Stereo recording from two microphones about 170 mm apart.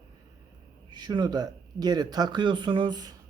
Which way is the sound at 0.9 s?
25° right (ahead or behind).